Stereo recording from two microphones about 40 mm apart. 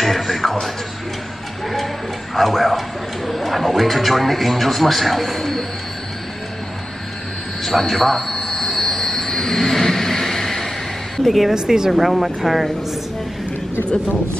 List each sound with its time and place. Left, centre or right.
0.0 s music: centre
2.3 s speech: centre
7.8 s a man's voice: centre
8.3 s vehicle: centre
11.2 s speech: centre
11.5 s speech: centre
12.0 s speech: centre